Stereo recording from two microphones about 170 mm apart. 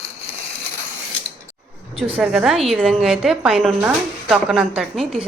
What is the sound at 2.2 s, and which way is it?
Speech, centre (ahead or behind).